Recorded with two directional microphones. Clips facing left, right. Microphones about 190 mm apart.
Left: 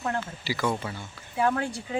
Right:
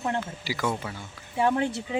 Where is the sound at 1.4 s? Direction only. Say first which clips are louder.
Right 2 dB; 20° right (ahead or behind).